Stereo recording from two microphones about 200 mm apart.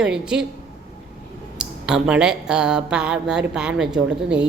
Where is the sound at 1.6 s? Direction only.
5° right (ahead or behind).